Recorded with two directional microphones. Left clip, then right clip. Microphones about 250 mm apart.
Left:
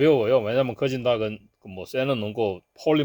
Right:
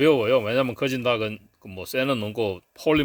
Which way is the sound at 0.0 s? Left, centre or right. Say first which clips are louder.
Even; centre.